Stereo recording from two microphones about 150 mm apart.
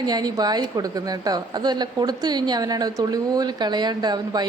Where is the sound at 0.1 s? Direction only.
25° right (ahead or behind).